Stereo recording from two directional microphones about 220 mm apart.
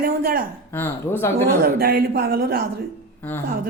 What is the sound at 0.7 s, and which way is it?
Speech, 10° left (ahead or behind).